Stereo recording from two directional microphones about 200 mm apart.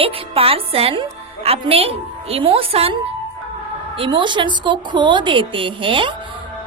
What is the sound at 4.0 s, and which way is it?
A woman's voice, 25° right (ahead or behind).